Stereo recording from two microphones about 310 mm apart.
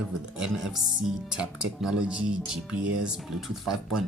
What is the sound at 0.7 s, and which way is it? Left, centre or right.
Speech, centre.